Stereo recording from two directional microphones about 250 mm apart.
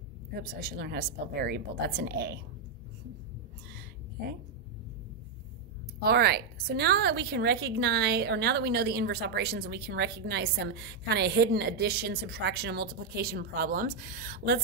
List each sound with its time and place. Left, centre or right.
0.4 s a woman's voice: right
5.9 s a woman's voice: right